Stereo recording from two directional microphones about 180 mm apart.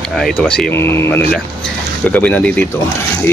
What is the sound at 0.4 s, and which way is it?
Speech, 5° left (ahead or behind).